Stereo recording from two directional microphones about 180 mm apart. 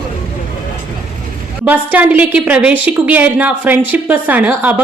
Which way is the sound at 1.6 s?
10° right (ahead or behind).